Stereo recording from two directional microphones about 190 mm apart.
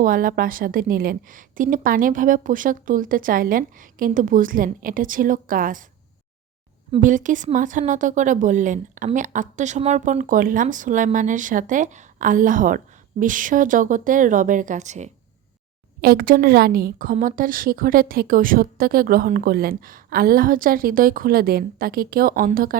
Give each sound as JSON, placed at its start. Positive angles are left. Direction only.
{"t": 0.0, "sound": "a woman's voice", "side_deg": -45}
{"t": 7.0, "sound": "a woman's voice", "side_deg": -40}
{"t": 16.0, "sound": "a woman's voice", "side_deg": -50}